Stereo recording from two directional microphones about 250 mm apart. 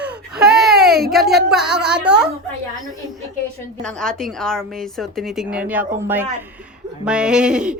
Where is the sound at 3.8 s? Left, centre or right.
Centre.